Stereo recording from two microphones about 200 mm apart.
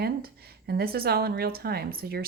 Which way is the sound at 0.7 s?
50° right (ahead or behind).